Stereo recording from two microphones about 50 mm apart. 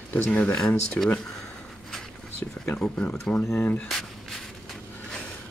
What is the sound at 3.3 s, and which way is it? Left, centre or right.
Speech, left.